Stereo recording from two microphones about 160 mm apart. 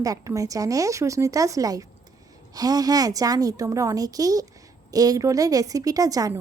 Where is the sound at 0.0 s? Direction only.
20° right (ahead or behind).